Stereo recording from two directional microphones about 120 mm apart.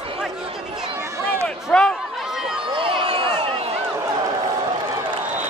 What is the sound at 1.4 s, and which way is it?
Run, 5° left (ahead or behind).